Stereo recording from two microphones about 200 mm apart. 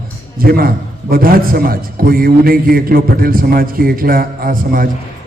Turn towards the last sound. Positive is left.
turn(degrees=-45)  # may be behind; listen again after turning